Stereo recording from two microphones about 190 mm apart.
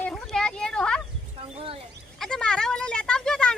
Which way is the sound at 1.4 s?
30° right (ahead or behind).